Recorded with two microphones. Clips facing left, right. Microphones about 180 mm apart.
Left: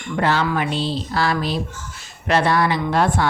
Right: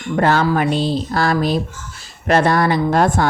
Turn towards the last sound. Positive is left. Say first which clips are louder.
# right 4 dB
turn(degrees=-45)  # may be behind; listen again after turning